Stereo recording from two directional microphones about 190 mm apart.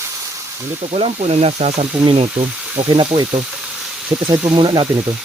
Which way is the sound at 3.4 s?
5° right (ahead or behind).